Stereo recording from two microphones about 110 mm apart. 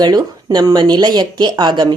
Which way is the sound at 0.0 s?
40° right (ahead or behind).